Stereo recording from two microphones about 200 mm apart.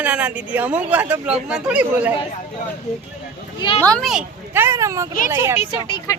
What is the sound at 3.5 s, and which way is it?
Speech, 25° left (ahead or behind).